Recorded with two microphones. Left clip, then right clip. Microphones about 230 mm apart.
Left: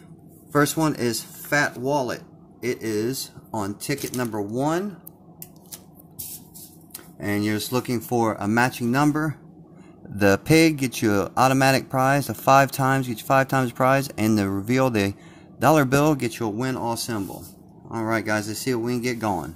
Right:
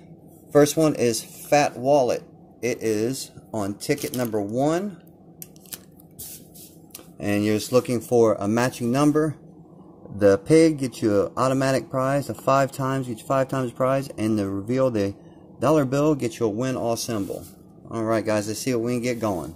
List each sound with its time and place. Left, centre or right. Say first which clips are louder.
0.5 s speech: right 3 dB; centre
7.2 s speech: right 2 dB; centre
10.1 s speech: right 2 dB; left
10.5 s speech: right 1 dB; left
10.9 s speech: right 1 dB; left
16.7 s speech: right 2 dB; centre